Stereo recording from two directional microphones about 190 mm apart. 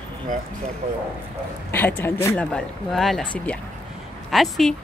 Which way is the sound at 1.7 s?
10° left (ahead or behind).